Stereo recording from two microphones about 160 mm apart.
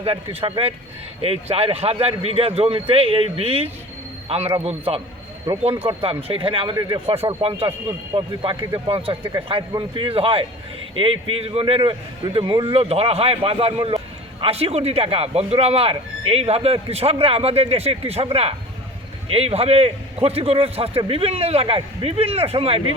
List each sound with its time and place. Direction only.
0.0 s speech: 35° right (ahead or behind)
5.5 s speech: 25° right (ahead or behind)
7.1 s speech: 40° right (ahead or behind)